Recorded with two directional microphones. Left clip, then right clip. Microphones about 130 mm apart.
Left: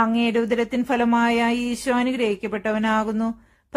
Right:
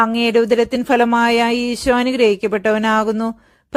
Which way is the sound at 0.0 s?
50° right (ahead or behind).